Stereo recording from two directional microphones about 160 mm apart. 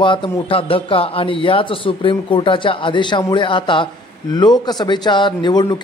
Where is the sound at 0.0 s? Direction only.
30° left (ahead or behind).